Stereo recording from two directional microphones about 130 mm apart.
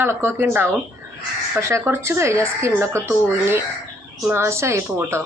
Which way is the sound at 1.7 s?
20° right (ahead or behind).